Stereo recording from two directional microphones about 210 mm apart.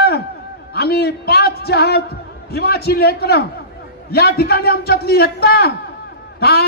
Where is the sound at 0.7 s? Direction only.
50° left (ahead or behind).